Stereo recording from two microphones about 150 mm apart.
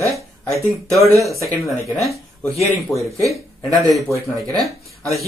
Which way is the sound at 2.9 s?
20° left (ahead or behind).